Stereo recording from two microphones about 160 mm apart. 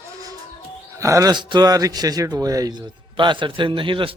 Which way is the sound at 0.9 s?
20° right (ahead or behind).